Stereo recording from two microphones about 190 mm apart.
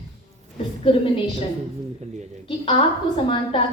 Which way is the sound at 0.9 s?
30° left (ahead or behind).